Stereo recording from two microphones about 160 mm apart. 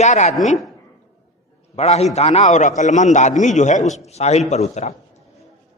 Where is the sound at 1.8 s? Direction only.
40° left (ahead or behind).